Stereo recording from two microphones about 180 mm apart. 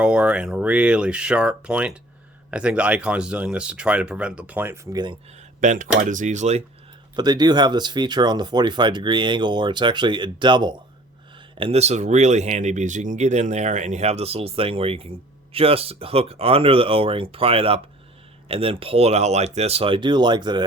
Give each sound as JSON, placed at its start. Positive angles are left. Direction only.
{"t": 0.0, "sound": "speech", "side_deg": -5}
{"t": 5.5, "sound": "speech", "side_deg": -45}
{"t": 7.2, "sound": "speech", "side_deg": -25}